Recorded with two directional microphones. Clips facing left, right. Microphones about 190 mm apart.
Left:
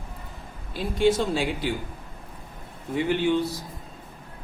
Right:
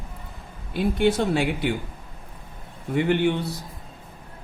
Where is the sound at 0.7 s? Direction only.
60° right (ahead or behind).